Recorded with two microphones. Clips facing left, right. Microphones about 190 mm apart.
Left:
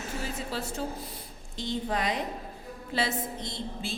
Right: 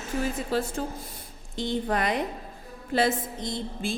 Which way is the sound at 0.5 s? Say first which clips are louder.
Right 4 dB; 50° right (ahead or behind).